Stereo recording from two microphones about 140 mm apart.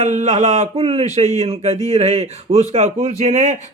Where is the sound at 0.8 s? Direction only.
45° right (ahead or behind).